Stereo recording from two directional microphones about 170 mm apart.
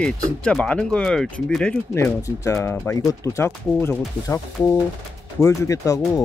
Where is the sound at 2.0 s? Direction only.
15° left (ahead or behind).